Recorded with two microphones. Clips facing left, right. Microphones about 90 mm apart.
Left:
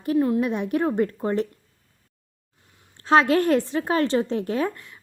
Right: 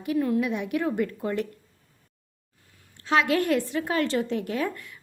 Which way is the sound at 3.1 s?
35° left (ahead or behind).